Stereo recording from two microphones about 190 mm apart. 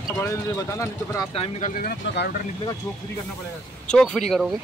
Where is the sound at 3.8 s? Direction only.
5° left (ahead or behind).